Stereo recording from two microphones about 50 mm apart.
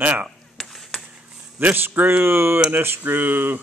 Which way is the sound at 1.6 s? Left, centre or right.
Right.